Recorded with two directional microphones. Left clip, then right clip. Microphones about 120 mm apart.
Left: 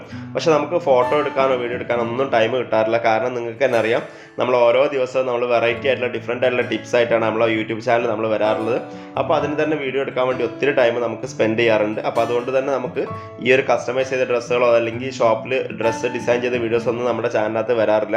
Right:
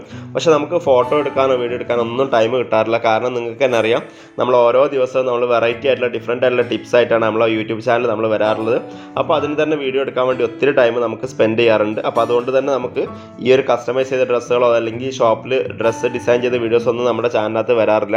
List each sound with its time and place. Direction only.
0.3 s speech: 35° right (ahead or behind)